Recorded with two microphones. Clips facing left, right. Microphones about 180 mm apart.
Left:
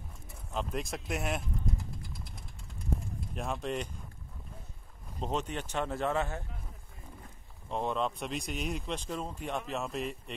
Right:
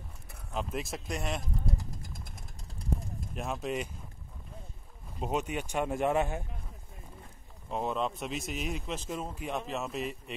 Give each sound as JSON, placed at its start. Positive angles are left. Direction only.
{"t": 0.5, "sound": "speech", "side_deg": 0}
{"t": 1.4, "sound": "a sound", "side_deg": -40}
{"t": 3.3, "sound": "speech", "side_deg": -5}
{"t": 5.2, "sound": "speech", "side_deg": -10}
{"t": 7.7, "sound": "speech", "side_deg": -5}